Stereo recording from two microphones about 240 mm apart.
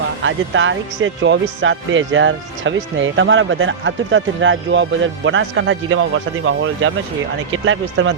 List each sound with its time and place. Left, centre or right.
0.2 s speech: right